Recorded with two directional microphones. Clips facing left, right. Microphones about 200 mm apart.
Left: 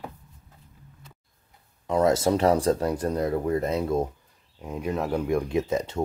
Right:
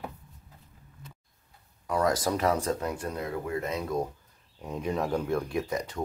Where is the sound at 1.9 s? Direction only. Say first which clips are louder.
Left 5 dB; 25° left (ahead or behind).